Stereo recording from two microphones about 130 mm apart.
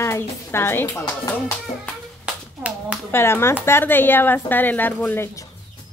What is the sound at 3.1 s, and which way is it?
A woman's voice, 20° left (ahead or behind).